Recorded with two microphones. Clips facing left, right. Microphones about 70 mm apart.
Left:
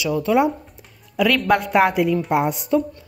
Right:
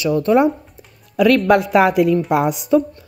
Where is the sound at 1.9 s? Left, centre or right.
Right.